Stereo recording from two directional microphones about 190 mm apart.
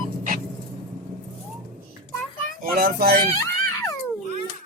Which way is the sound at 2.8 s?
50° right (ahead or behind).